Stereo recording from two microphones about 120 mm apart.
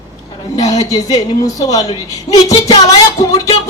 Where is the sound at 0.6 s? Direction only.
65° left (ahead or behind).